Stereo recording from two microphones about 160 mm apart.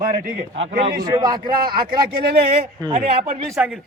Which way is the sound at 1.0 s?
25° right (ahead or behind).